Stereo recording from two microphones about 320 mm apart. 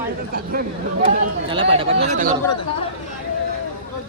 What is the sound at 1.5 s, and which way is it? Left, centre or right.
Speech, centre.